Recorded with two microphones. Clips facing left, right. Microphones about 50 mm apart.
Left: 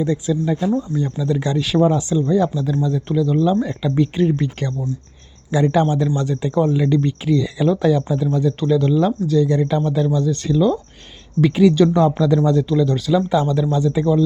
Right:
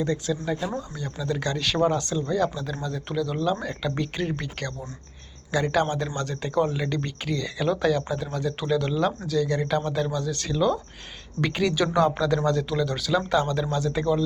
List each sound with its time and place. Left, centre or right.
0.0 s speech: centre
5.7 s speech: centre
8.4 s speech: centre